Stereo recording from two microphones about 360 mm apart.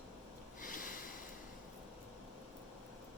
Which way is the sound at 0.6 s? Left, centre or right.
Left.